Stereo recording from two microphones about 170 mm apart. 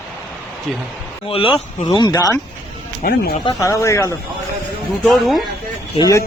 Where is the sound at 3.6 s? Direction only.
15° left (ahead or behind).